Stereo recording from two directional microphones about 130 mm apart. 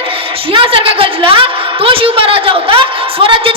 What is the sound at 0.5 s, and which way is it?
A woman's voice, 45° right (ahead or behind).